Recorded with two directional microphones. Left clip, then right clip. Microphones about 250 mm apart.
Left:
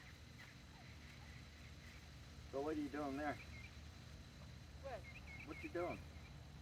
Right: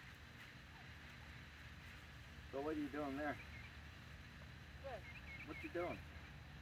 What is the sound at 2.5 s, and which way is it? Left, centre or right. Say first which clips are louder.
Speech: left 1 dB; centre.